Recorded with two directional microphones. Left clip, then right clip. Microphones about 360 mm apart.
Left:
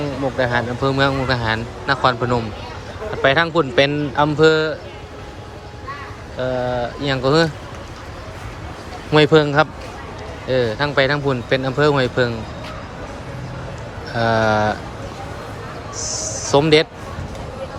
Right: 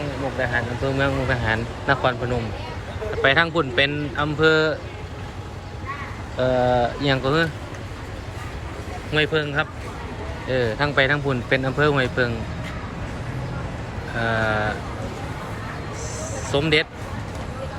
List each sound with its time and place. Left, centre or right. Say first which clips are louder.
0.3 s a man's voice: left 4 dB; centre
3.2 s a man's voice: left 3 dB; centre
6.4 s a man's voice: right 2 dB; centre
9.1 s a man's voice: left 8 dB; centre
14.2 s a man's voice: left 6 dB; centre
16.0 s a sound: left 5 dB; left
16.6 s a man's voice: left 6 dB; centre